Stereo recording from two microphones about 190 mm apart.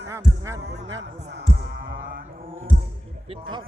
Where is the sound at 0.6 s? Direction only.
60° right (ahead or behind).